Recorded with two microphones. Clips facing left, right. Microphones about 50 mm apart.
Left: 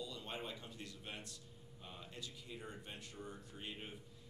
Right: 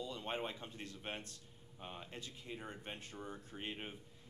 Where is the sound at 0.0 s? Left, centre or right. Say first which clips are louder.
Right 4 dB; right.